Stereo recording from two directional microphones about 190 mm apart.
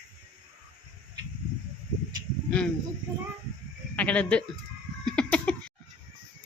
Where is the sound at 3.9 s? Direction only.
5° left (ahead or behind).